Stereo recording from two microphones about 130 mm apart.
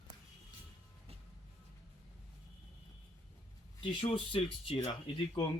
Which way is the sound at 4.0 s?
45° left (ahead or behind).